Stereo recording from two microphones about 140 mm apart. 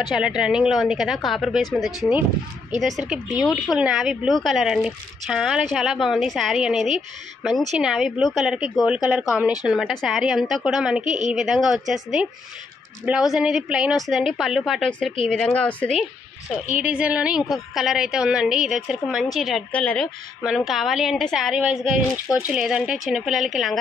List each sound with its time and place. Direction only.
0.1 s speech: 5° right (ahead or behind)
11.1 s a woman's voice: 60° right (ahead or behind)
11.3 s speech: centre (ahead or behind)
16.8 s speech: 10° right (ahead or behind); by 20.1 s 10° left (ahead or behind)
20.4 s speech: 5° right (ahead or behind)